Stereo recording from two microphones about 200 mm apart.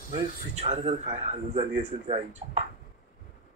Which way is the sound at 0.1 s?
30° right (ahead or behind).